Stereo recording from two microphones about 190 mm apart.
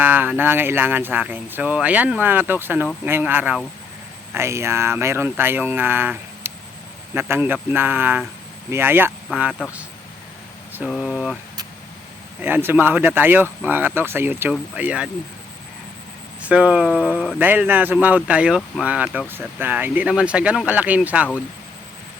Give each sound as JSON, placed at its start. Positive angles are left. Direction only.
{"t": 0.0, "sound": "speech", "side_deg": -10}
{"t": 10.8, "sound": "speech", "side_deg": 0}
{"t": 12.4, "sound": "speech", "side_deg": -10}
{"t": 16.4, "sound": "speech", "side_deg": -5}